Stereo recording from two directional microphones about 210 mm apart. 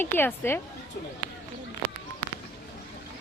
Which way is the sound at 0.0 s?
10° left (ahead or behind).